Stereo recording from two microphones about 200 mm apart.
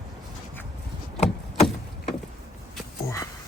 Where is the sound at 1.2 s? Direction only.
35° left (ahead or behind).